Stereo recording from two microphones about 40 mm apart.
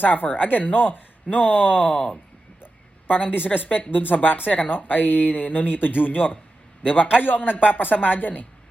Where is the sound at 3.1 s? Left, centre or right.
Left.